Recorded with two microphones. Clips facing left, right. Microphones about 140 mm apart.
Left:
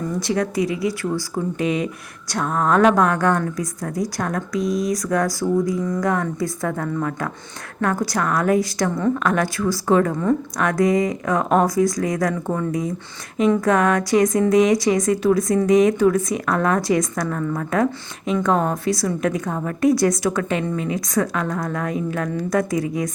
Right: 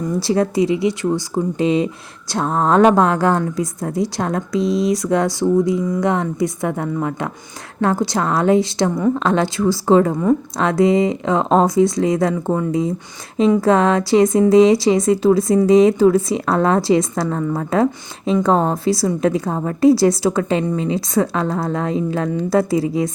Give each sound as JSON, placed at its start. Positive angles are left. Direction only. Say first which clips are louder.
{"t": 0.2, "sound": "a woman's voice", "louder": "right 5 dB", "side_deg": -30}